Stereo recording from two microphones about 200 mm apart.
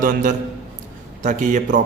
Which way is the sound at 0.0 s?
40° right (ahead or behind).